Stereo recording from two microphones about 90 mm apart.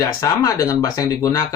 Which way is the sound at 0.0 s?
40° left (ahead or behind).